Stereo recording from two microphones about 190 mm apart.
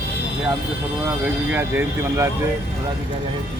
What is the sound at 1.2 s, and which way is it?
Speech, 10° right (ahead or behind).